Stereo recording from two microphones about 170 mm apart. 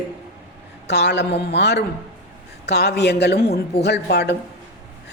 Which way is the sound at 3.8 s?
80° left.